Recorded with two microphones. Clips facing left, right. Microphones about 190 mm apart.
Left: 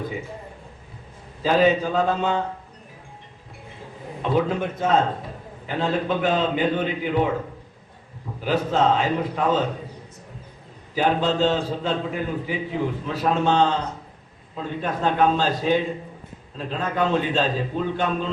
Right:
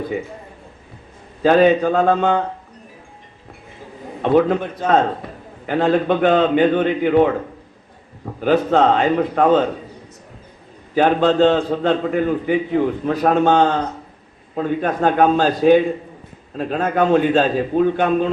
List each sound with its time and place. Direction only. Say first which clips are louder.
1.4 s a man's voice: right 6 dB; 55° right (ahead or behind)
4.2 s a man's voice: right 7 dB; 55° right (ahead or behind)
5.6 s a man's voice: right 7 dB; 60° right (ahead or behind)
10.9 s a man's voice: right 7 dB; 55° right (ahead or behind)